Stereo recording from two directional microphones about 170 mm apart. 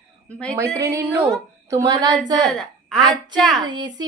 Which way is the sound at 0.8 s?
15° right (ahead or behind).